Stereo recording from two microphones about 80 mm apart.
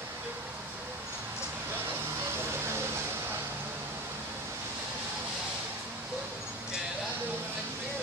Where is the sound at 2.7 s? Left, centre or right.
Right.